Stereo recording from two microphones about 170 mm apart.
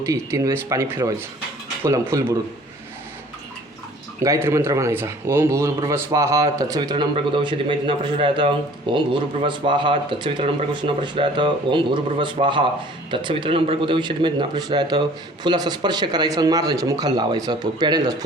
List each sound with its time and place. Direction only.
0.0 s speech: 20° right (ahead or behind)
4.2 s speech: 15° right (ahead or behind)